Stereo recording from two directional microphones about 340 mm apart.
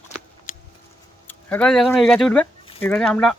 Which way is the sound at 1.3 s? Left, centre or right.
Centre.